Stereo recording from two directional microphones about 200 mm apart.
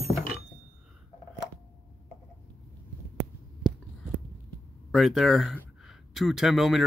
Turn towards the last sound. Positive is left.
turn(degrees=0)  # may be behind; listen again after turning